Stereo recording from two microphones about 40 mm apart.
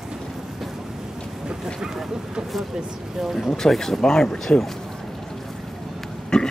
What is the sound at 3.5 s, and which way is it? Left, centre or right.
Speech, centre.